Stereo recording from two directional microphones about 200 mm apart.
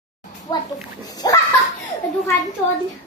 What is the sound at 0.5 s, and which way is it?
Speech, 15° left (ahead or behind).